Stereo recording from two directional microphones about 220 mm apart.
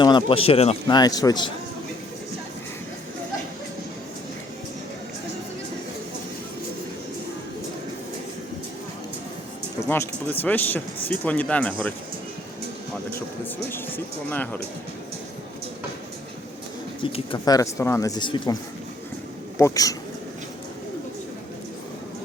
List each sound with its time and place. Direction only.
0.0 s a man's voice: 20° left (ahead or behind)
10.4 s speech: 10° left (ahead or behind)
13.4 s speech: 10° left (ahead or behind)
17.0 s speech: 20° left (ahead or behind)
19.5 s speech: 15° left (ahead or behind)